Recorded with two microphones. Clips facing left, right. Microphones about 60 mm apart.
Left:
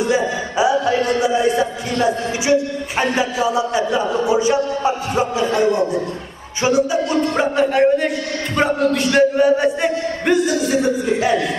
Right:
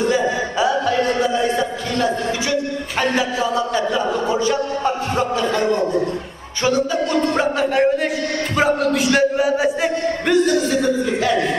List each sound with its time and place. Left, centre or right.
0.0 s music: centre
1.2 s a man's voice: centre
7.3 s a man's voice: centre
10.7 s speech: left